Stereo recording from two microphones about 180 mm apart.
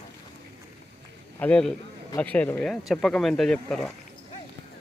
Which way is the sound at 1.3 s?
5° left (ahead or behind).